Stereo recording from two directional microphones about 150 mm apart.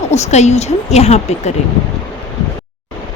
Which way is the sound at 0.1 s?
45° left (ahead or behind).